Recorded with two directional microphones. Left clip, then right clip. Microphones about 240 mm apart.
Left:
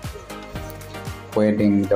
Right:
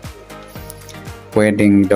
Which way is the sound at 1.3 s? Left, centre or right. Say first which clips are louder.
Right 6 dB; right.